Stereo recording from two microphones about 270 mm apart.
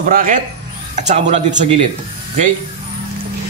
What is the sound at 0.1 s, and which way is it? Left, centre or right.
A man's voice, right.